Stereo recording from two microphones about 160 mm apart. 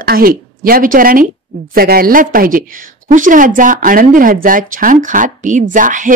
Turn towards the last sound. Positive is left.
turn(degrees=-55)  # may be behind; listen again after turning